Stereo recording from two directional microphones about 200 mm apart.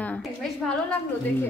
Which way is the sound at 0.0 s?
5° left (ahead or behind).